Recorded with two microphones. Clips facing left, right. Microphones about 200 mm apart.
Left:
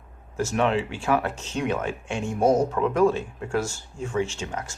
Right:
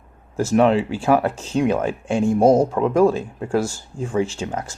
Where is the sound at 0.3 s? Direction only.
35° right (ahead or behind).